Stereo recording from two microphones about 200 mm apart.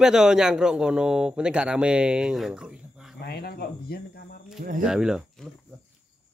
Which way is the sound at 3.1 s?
55° left (ahead or behind).